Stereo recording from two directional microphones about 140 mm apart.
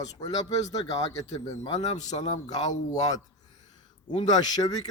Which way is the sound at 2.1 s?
40° left (ahead or behind).